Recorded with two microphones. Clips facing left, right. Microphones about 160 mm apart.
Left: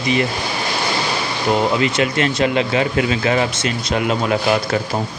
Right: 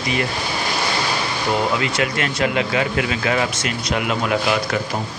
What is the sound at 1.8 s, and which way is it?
Speech, 25° left (ahead or behind).